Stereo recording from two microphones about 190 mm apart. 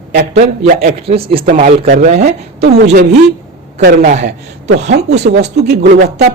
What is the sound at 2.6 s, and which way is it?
A man's voice, 60° right (ahead or behind).